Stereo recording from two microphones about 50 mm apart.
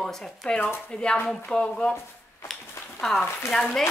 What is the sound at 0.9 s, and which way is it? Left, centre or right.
A woman's voice, left.